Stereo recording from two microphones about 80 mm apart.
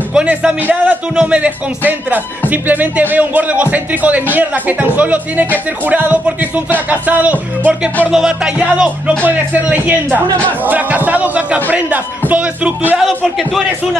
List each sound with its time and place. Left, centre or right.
0.1 s a man's voice: centre
8.1 s a man's voice: centre
13.0 s a man's voice: centre